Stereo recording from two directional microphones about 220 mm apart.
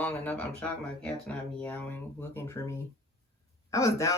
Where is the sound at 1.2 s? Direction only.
5° left (ahead or behind).